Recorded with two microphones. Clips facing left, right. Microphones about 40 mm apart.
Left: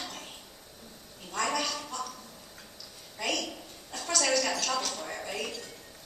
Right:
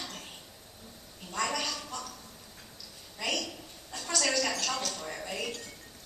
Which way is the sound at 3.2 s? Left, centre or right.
Centre.